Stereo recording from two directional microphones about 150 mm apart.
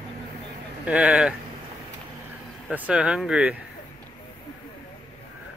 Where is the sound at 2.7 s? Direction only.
10° right (ahead or behind).